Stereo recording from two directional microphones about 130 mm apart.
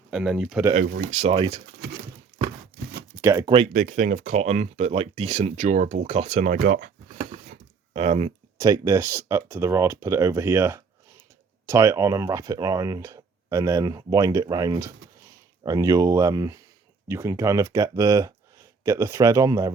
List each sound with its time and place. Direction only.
0.1 s speech: 5° right (ahead or behind)
0.7 s speech: 65° right (ahead or behind)
1.3 s speech: 40° right (ahead or behind)
3.2 s speech: 25° right (ahead or behind)
3.7 s speech: 80° right; by 6.4 s 50° right (ahead or behind)
6.4 s a sound: 85° right
7.9 s speech: 50° right (ahead or behind)
8.5 s speech: 30° right (ahead or behind)